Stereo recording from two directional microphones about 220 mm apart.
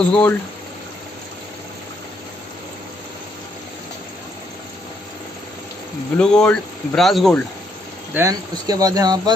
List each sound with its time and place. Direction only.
0.0 s speech: 5° left (ahead or behind)
6.1 s speech: 5° left (ahead or behind)
8.1 s speech: 15° right (ahead or behind)